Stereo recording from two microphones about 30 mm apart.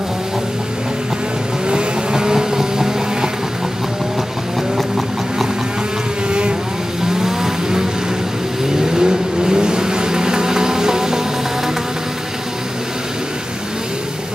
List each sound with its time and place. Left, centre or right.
1.7 s vehicle: right
4.7 s vehicle: centre
7.1 s vehicle: centre